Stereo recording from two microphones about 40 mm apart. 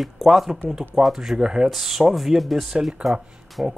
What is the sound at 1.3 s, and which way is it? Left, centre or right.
Speech, centre.